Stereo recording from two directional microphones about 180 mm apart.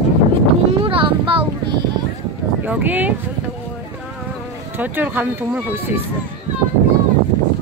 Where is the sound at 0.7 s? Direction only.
30° right (ahead or behind).